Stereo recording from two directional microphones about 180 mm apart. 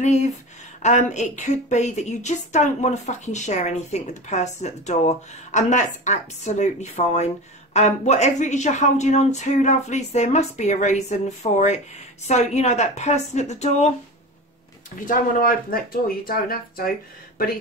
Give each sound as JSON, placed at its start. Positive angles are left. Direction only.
{"t": 0.0, "sound": "a woman's voice", "side_deg": 40}
{"t": 15.0, "sound": "speech", "side_deg": 50}